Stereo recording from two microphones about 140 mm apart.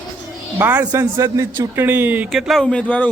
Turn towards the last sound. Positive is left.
turn(degrees=10)  # may be behind; listen again after turning